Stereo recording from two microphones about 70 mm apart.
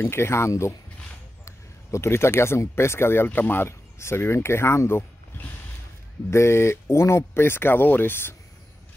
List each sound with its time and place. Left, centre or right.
0.1 s speech: left